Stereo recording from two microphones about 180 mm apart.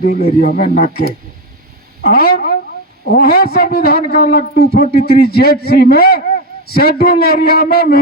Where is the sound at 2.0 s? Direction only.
60° left (ahead or behind).